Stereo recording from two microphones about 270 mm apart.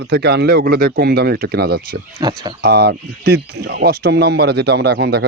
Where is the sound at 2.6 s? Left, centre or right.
Right.